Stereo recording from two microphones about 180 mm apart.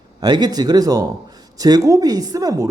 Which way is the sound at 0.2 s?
25° right (ahead or behind).